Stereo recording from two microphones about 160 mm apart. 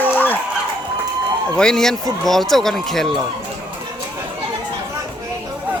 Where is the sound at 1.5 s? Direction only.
5° left (ahead or behind).